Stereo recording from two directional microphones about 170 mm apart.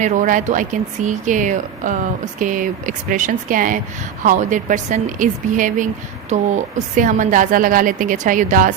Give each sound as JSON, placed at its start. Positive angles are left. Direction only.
{"t": 0.0, "sound": "a woman's voice", "side_deg": -50}